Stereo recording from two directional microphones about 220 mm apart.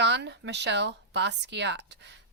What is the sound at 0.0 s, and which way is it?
Speech, 50° right (ahead or behind).